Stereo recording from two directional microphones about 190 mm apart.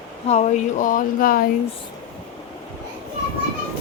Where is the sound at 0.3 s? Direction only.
35° left (ahead or behind).